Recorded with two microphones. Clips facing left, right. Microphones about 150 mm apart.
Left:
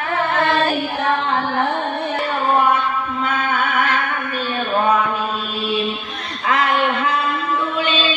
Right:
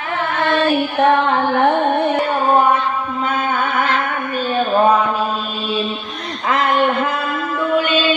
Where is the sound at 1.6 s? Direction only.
60° right (ahead or behind).